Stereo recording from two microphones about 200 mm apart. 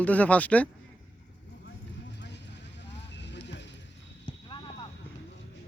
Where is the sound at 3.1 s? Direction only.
60° left (ahead or behind).